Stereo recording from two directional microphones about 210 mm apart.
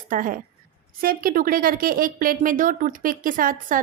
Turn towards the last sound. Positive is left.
turn(degrees=-40)  # may be behind; listen again after turning